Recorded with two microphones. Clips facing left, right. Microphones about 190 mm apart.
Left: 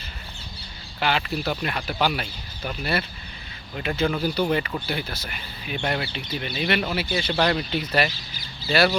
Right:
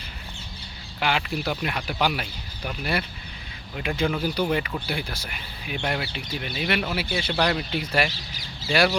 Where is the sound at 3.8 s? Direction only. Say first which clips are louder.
Left 1 dB; 5° right (ahead or behind).